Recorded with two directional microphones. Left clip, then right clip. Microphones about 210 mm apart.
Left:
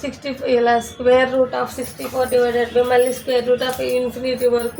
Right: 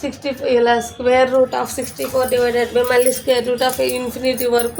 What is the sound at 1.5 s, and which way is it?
Speech, 55° right (ahead or behind).